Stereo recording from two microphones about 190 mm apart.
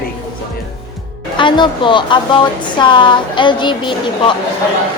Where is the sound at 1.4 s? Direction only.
25° left (ahead or behind).